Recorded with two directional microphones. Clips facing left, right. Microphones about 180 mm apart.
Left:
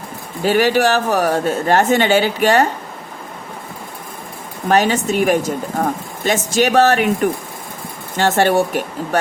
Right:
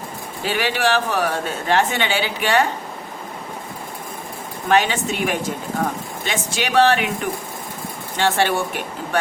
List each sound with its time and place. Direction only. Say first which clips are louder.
0.4 s speech: left 7 dB; 45° left (ahead or behind)
4.7 s speech: left 4 dB; 40° left (ahead or behind)